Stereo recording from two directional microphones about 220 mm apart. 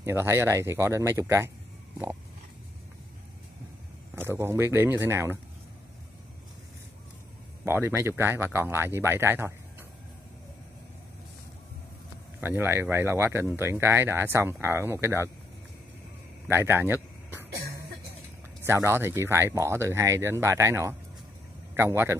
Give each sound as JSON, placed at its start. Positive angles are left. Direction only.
{"t": 0.0, "sound": "speech", "side_deg": -10}
{"t": 4.1, "sound": "speech", "side_deg": -10}
{"t": 7.6, "sound": "speech", "side_deg": -10}
{"t": 12.4, "sound": "speech", "side_deg": -10}
{"t": 16.4, "sound": "a sound", "side_deg": -10}
{"t": 17.6, "sound": "music", "side_deg": -45}
{"t": 18.6, "sound": "speech", "side_deg": -10}